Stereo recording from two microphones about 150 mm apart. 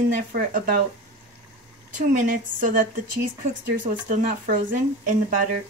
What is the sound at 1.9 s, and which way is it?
Speech, 60° right (ahead or behind).